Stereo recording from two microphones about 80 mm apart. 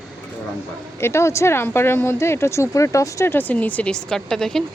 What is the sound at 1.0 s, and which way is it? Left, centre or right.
Speech, left.